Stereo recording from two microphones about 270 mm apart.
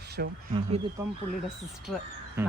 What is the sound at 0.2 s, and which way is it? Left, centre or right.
Speech, right.